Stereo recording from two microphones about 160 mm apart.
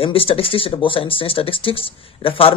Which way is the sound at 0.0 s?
35° left (ahead or behind).